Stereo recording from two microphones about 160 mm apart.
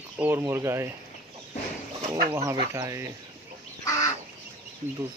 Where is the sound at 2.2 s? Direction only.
20° right (ahead or behind).